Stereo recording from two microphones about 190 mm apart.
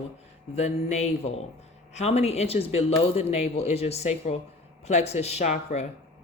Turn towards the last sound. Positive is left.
turn(degrees=35)  # may be behind; listen again after turning